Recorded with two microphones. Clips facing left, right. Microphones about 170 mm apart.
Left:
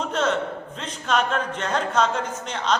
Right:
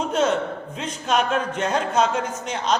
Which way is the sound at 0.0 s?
10° right (ahead or behind).